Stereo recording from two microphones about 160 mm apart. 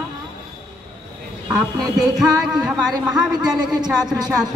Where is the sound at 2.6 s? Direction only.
5° right (ahead or behind).